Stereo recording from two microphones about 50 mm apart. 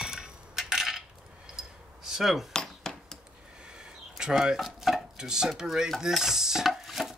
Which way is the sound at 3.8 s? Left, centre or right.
Centre.